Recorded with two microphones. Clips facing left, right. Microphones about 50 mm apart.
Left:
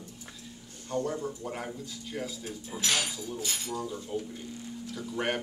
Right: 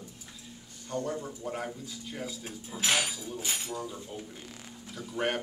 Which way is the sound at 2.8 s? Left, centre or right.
Right.